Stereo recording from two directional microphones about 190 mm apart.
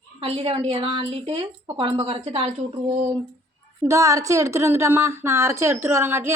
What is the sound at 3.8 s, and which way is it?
A woman's voice, 15° right (ahead or behind).